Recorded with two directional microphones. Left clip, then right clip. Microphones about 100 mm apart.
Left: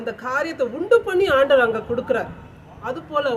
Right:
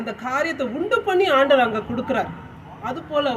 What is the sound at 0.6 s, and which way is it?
A woman's voice, 45° left (ahead or behind).